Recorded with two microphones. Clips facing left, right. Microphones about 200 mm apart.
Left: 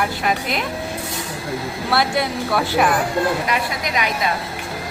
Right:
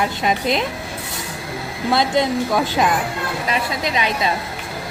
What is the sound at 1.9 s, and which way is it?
Speech, 20° right (ahead or behind).